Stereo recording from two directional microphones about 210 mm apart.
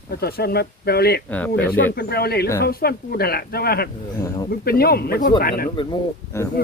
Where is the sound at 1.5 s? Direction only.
45° left (ahead or behind).